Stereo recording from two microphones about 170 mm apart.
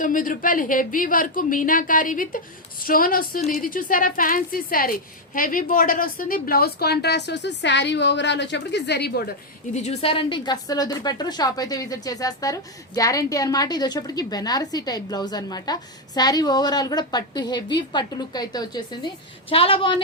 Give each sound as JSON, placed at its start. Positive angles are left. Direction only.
{"t": 0.0, "sound": "a woman's voice", "side_deg": 55}
{"t": 9.7, "sound": "a woman's voice", "side_deg": 40}